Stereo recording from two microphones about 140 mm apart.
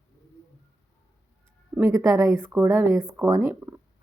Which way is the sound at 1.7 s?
15° right (ahead or behind).